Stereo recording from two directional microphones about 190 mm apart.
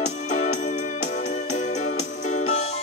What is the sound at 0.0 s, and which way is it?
Music, 35° left (ahead or behind).